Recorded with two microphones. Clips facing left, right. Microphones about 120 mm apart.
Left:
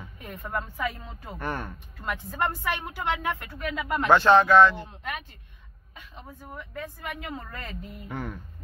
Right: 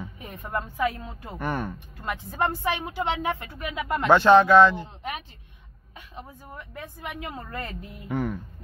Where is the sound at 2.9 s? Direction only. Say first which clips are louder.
Right 2 dB; 25° right (ahead or behind).